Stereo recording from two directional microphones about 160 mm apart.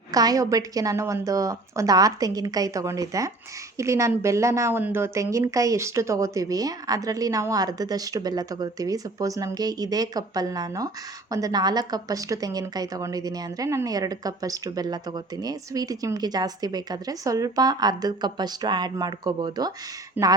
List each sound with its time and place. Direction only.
0.1 s a woman's voice: 25° right (ahead or behind)
20.2 s speech: 10° right (ahead or behind)